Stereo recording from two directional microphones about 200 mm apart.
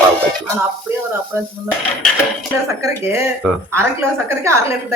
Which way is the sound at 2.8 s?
15° right (ahead or behind).